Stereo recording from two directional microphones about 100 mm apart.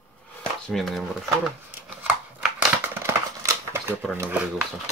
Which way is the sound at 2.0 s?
15° right (ahead or behind).